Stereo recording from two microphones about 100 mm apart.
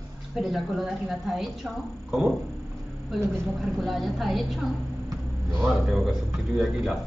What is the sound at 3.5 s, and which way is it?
Speech, centre (ahead or behind).